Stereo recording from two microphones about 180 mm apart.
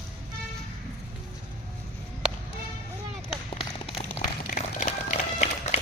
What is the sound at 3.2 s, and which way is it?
Run, 30° left (ahead or behind).